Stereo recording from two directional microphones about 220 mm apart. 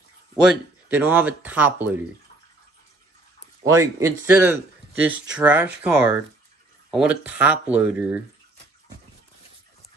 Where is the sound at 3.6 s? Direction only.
15° right (ahead or behind).